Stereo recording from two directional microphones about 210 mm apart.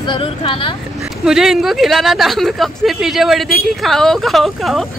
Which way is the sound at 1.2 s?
Centre (ahead or behind).